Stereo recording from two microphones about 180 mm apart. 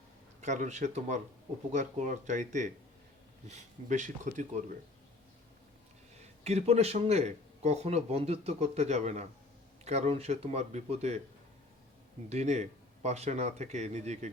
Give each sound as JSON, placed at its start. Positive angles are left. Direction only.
{"t": 0.4, "sound": "speech", "side_deg": -40}
{"t": 6.1, "sound": "speech", "side_deg": -35}
{"t": 12.3, "sound": "speech", "side_deg": -40}